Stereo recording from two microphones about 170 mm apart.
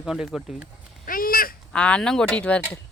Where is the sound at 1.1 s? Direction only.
55° left (ahead or behind).